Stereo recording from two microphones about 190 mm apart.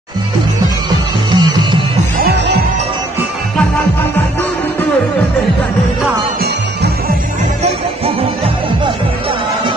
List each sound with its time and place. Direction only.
0.8 s music: 20° right (ahead or behind)
2.2 s music: 65° right (ahead or behind)